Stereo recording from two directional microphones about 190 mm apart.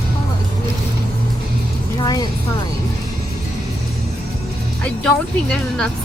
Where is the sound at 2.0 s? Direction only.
20° left (ahead or behind).